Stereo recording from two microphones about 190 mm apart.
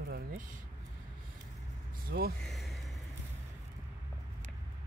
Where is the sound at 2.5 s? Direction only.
Centre (ahead or behind).